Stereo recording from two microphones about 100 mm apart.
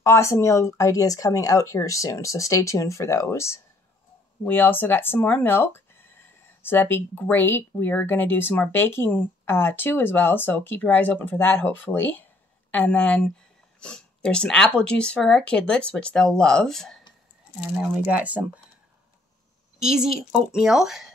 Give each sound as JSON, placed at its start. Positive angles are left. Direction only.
{"t": 0.0, "sound": "speech", "side_deg": 30}
{"t": 17.7, "sound": "speech", "side_deg": -15}
{"t": 19.8, "sound": "a woman's voice", "side_deg": -5}